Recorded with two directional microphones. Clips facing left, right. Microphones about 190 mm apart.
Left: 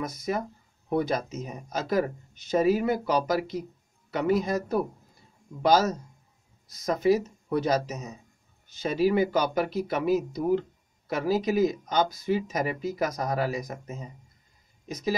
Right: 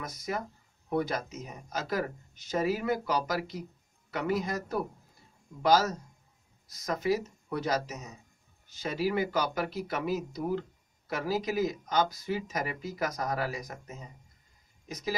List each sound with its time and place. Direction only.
0.0 s speech: 25° left (ahead or behind)